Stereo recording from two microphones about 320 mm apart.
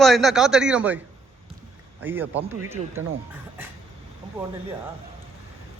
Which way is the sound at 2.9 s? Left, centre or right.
Right.